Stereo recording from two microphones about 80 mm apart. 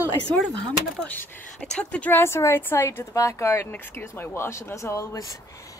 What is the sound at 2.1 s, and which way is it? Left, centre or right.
Speech, left.